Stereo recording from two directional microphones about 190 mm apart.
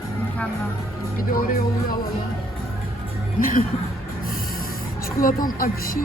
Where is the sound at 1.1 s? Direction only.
50° left (ahead or behind).